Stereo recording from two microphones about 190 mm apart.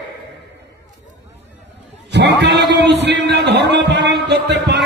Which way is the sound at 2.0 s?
65° right (ahead or behind).